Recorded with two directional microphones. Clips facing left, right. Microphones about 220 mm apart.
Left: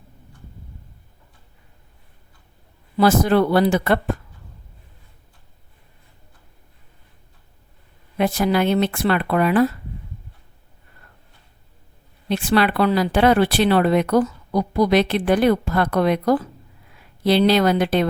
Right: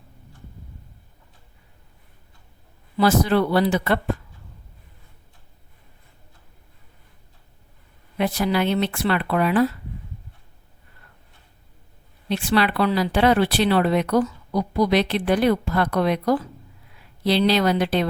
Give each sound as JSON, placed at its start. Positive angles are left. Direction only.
{"t": 3.0, "sound": "speech", "side_deg": 50}
{"t": 8.2, "sound": "speech", "side_deg": 45}
{"t": 12.3, "sound": "speech", "side_deg": 50}